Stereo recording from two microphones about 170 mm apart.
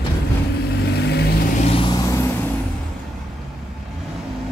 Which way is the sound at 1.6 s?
30° left (ahead or behind).